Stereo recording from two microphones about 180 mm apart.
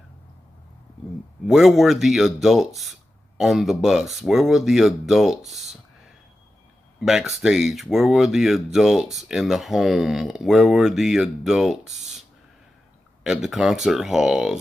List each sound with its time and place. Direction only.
1.5 s speech: centre (ahead or behind)
7.0 s speech: centre (ahead or behind)